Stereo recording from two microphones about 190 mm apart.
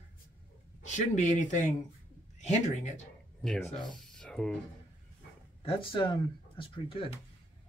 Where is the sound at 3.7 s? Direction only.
25° left (ahead or behind).